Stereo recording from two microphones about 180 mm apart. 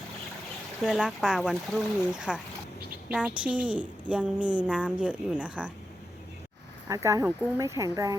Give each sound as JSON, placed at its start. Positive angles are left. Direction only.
{"t": 0.8, "sound": "a woman's voice", "side_deg": 0}
{"t": 6.8, "sound": "a woman's voice", "side_deg": -15}